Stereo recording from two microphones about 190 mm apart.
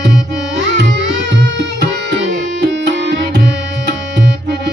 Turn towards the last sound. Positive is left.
turn(degrees=-70)  # may be behind; listen again after turning